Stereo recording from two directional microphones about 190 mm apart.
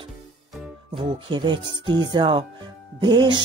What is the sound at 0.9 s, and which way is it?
Speech, 25° right (ahead or behind).